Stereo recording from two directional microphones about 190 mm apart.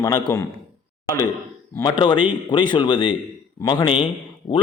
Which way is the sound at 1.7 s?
20° left (ahead or behind).